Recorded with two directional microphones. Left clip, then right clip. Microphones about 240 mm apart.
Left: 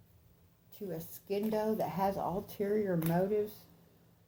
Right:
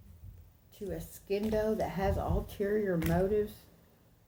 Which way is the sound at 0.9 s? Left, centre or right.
Centre.